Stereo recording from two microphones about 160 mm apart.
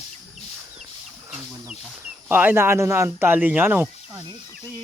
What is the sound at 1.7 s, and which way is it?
Speech, 10° right (ahead or behind).